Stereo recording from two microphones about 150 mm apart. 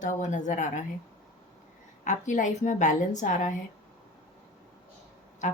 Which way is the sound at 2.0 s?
55° left (ahead or behind).